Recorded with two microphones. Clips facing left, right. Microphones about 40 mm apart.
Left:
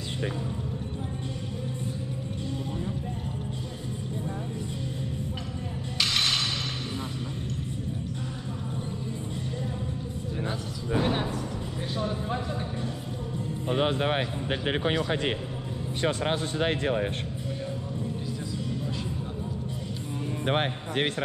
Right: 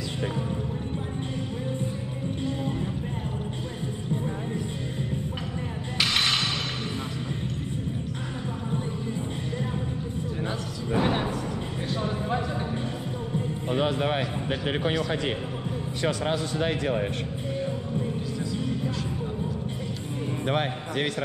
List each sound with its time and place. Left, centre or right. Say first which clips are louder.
5.9 s mechanisms: right 2 dB; centre
10.9 s music: right 2 dB; right
13.7 s a sound: even; left
14.9 s speech: even; left
20.4 s a man's voice: even; left